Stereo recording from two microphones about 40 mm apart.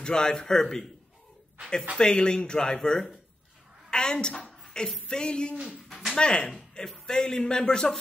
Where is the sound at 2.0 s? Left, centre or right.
Centre.